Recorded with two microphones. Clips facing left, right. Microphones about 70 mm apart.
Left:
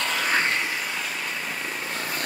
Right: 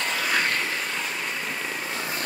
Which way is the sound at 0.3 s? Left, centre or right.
Left.